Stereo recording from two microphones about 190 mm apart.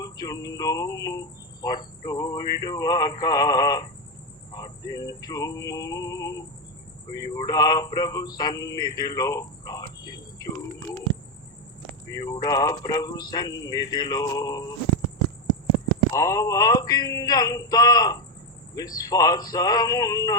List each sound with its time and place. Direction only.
0.0 s a man's voice: 20° left (ahead or behind)
12.1 s a man's voice: 20° left (ahead or behind)
16.1 s a man's voice: 15° left (ahead or behind)